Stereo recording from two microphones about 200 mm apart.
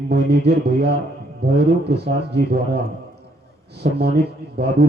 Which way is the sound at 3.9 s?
55° right (ahead or behind).